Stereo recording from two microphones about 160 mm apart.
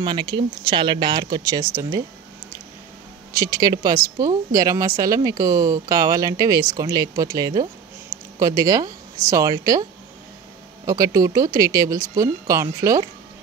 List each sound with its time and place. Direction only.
0.0 s speech: 30° right (ahead or behind)
3.3 s speech: 20° right (ahead or behind)
10.9 s speech: 20° right (ahead or behind)